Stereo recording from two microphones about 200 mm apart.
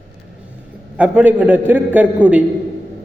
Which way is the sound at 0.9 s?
10° right (ahead or behind).